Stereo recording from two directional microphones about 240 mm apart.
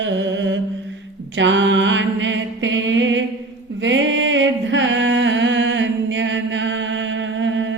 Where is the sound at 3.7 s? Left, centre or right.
Right.